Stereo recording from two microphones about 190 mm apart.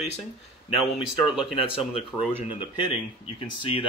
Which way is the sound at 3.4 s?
30° left (ahead or behind).